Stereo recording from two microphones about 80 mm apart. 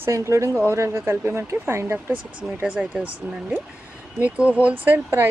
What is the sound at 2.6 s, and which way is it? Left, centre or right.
Speech, centre.